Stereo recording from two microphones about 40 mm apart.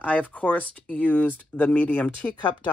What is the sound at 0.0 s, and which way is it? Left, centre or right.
Speech, left.